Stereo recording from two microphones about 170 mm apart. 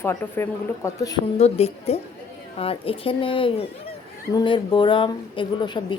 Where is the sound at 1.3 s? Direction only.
35° left (ahead or behind).